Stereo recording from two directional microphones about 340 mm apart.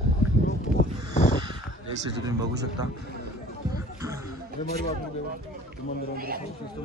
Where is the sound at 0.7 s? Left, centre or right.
Centre.